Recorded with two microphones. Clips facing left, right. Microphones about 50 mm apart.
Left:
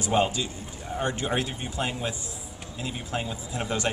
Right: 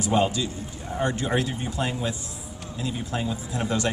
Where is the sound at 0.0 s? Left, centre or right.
Left.